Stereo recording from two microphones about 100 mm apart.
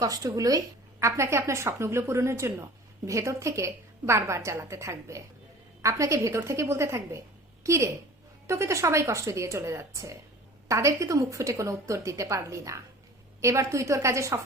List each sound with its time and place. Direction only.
0.0 s a woman's voice: 35° right (ahead or behind)